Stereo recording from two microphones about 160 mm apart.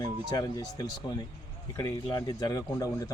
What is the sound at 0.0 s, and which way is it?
A man's voice, 20° left (ahead or behind).